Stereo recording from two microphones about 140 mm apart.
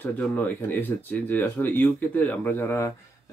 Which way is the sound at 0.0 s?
15° left (ahead or behind).